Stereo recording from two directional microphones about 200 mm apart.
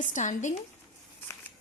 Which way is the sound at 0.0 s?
40° left (ahead or behind).